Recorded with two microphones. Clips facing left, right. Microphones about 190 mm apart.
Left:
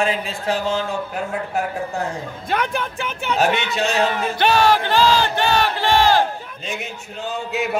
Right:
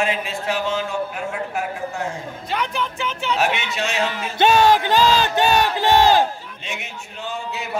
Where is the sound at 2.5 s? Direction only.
50° left (ahead or behind).